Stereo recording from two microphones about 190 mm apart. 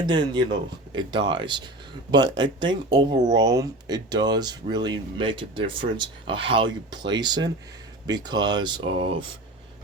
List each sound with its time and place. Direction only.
0.0 s speech: 25° right (ahead or behind)